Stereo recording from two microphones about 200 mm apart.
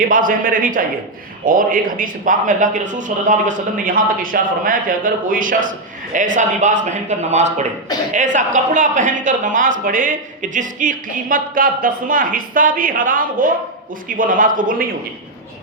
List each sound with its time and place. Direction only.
0.0 s a man's voice: 45° right (ahead or behind)